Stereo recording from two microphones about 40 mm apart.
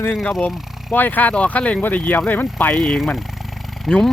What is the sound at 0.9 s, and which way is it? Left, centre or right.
Speech, left.